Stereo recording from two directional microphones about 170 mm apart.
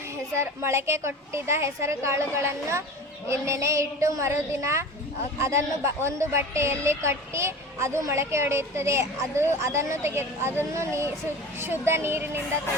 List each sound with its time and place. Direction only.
0.3 s a woman's voice: 15° right (ahead or behind)